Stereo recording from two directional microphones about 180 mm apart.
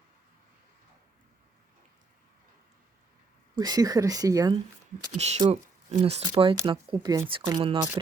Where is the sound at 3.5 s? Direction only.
20° right (ahead or behind).